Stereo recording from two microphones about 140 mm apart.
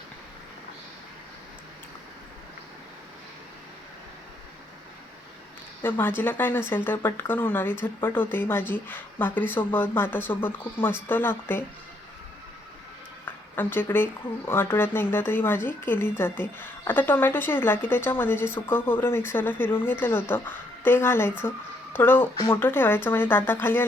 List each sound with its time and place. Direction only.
5.8 s speech: 15° left (ahead or behind)
13.2 s speech: 15° left (ahead or behind)